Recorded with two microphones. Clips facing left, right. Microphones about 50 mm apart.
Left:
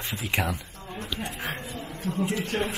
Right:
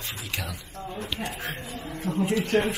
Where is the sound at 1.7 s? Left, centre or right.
Right.